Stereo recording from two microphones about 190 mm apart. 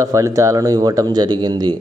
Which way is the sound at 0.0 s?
15° right (ahead or behind).